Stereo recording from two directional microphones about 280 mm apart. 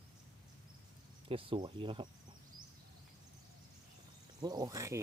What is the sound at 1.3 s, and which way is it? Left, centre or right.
Speech, centre.